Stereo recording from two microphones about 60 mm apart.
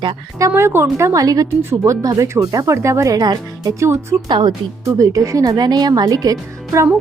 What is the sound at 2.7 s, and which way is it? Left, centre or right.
Speech, right.